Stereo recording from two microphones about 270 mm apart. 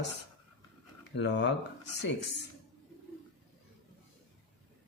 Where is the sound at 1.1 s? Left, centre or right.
Left.